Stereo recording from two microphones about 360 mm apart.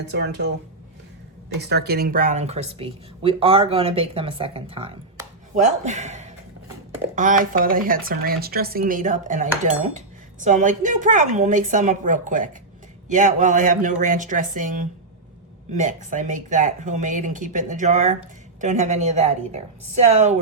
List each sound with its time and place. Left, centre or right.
0.1 s speech: right
1.6 s speech: right